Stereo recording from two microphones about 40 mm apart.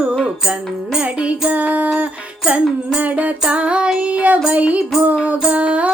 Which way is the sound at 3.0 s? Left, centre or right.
Right.